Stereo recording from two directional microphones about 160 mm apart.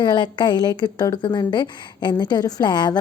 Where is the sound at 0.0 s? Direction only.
30° left (ahead or behind).